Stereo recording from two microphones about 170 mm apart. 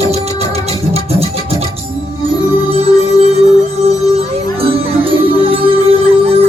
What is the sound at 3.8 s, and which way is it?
Music, 35° right (ahead or behind).